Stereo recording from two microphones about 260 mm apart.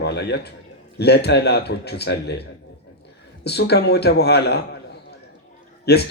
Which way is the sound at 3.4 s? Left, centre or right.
Left.